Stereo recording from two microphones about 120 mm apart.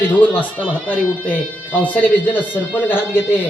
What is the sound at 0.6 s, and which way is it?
Speech, 15° right (ahead or behind).